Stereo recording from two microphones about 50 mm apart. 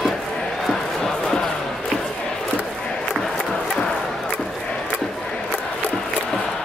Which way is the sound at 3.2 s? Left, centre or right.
Centre.